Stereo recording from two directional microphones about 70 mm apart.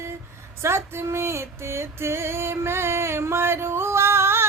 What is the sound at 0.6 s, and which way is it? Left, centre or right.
Female singing, right.